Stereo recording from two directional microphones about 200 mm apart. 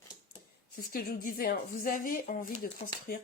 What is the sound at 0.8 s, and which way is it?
Speech, 45° left (ahead or behind).